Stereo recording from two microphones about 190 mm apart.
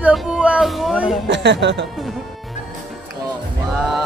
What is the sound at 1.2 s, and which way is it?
Speech, 65° right (ahead or behind).